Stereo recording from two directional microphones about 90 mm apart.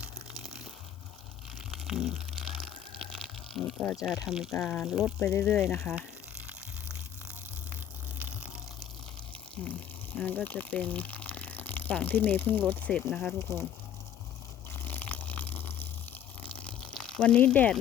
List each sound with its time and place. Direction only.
0.4 s crunch: 5° right (ahead or behind)
1.7 s a sound: 5° right (ahead or behind)
3.9 s speech: 5° right (ahead or behind)
5.2 s speech: 25° left (ahead or behind)
5.5 s speech: centre (ahead or behind)
9.6 s speech: 10° left (ahead or behind)
13.1 s speech: centre (ahead or behind)
13.4 s speech: 30° left (ahead or behind)
14.7 s a sound: 20° left (ahead or behind)